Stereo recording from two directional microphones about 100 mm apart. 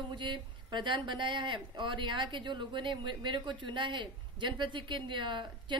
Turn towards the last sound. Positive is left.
turn(degrees=-55)  # may be behind; listen again after turning